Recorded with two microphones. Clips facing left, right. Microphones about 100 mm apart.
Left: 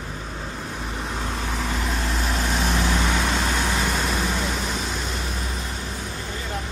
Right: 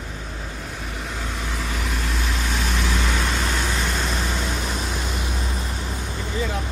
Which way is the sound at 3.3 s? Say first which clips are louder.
Left 1 dB; 15° left (ahead or behind).